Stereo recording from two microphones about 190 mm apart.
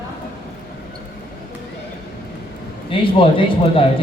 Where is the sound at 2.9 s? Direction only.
30° left (ahead or behind).